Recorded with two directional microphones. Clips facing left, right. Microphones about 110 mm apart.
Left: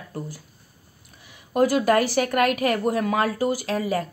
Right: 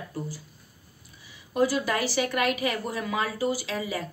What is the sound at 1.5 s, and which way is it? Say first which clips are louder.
A woman's voice: left 6 dB; 55° left (ahead or behind).